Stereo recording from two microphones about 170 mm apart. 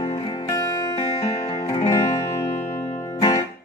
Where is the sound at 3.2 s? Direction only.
25° left (ahead or behind).